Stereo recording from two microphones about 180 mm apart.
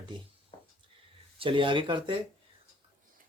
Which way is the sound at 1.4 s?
30° right (ahead or behind).